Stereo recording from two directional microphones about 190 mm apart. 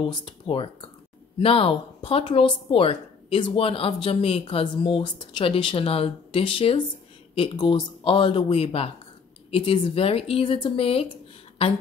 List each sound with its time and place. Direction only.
0.0 s speech: 25° left (ahead or behind)